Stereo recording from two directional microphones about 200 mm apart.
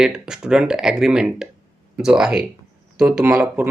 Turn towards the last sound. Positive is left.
turn(degrees=-10)  # may be behind; listen again after turning